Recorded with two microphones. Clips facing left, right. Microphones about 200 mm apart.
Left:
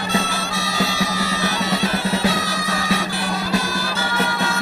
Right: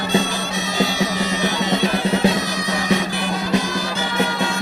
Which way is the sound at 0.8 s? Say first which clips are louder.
Right 3 dB; 20° right (ahead or behind).